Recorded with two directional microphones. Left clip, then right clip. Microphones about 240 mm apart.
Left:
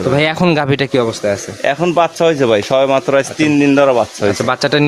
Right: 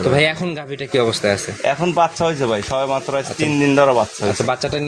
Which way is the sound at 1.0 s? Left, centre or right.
Left.